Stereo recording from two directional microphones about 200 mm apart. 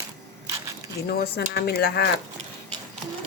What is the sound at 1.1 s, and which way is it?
Speech, 50° left (ahead or behind).